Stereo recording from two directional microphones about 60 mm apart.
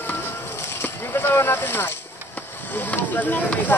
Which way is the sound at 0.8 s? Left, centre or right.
Left.